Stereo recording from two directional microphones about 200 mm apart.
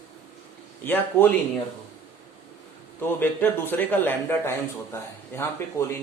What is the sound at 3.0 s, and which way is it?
A man's voice, 10° left (ahead or behind).